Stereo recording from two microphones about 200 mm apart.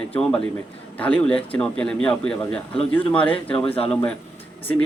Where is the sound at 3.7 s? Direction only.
30° left (ahead or behind).